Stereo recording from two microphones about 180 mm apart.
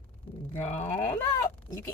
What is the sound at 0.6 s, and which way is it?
Speech, 40° left (ahead or behind).